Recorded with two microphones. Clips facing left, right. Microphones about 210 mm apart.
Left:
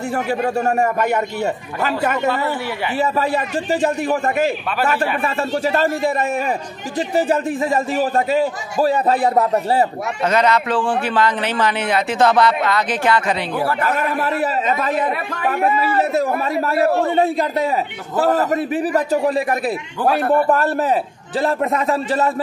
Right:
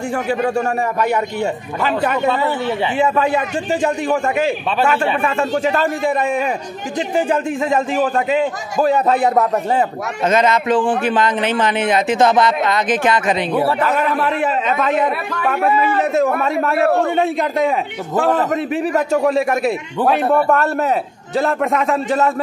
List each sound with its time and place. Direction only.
0.7 s a man's voice: 45° left (ahead or behind)
4.0 s a man's voice: 40° left (ahead or behind)
8.8 s a man's voice: 35° left (ahead or behind)
10.2 s speech: 20° right (ahead or behind)
13.8 s a man's voice: 40° left (ahead or behind)
18.6 s a man's voice: 5° left (ahead or behind)
21.4 s a man's voice: 30° left (ahead or behind)